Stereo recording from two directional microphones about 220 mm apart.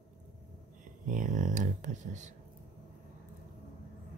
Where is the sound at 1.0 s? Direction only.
35° right (ahead or behind).